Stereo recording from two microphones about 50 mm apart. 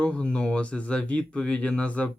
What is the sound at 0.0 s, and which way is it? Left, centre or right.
Speech, left.